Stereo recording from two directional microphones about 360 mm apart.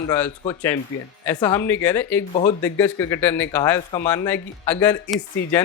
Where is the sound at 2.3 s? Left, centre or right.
Centre.